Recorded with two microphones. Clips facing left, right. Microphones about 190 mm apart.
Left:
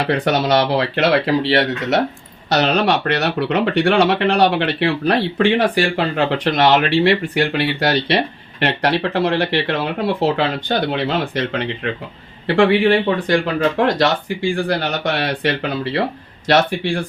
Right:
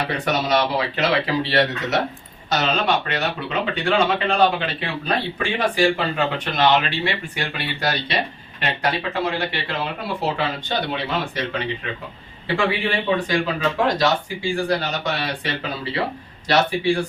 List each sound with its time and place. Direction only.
0.1 s speech: 70° left (ahead or behind)